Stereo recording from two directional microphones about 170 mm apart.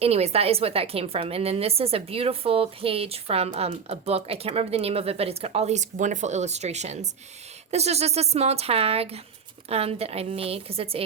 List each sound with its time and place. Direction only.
0.0 s a woman's voice: 35° right (ahead or behind)